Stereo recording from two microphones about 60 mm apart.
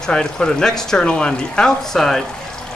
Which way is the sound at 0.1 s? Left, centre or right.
Centre.